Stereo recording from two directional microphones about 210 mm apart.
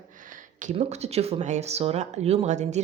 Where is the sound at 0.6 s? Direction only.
30° right (ahead or behind).